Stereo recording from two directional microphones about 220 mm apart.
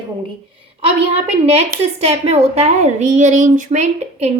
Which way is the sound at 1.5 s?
30° right (ahead or behind).